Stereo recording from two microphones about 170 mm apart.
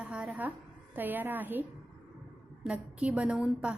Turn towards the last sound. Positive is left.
turn(degrees=-5)  # may be behind; listen again after turning